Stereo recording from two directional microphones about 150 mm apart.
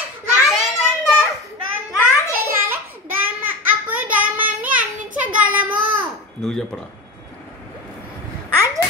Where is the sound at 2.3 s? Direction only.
15° right (ahead or behind).